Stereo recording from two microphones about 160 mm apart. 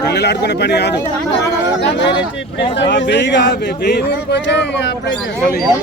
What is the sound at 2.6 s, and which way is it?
Speech, 90° left.